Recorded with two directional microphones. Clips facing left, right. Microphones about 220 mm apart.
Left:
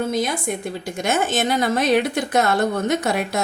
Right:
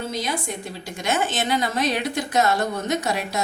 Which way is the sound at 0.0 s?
50° left (ahead or behind).